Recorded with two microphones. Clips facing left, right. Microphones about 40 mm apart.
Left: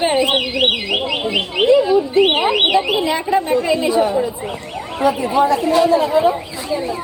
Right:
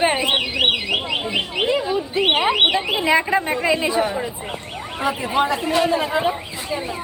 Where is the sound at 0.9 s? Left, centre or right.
Left.